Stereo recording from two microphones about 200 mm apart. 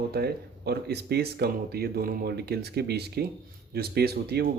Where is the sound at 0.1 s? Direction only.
55° right (ahead or behind).